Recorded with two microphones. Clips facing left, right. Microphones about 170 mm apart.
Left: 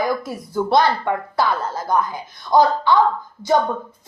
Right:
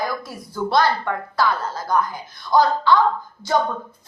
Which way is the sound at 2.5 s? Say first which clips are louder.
Left 2 dB; 50° left (ahead or behind).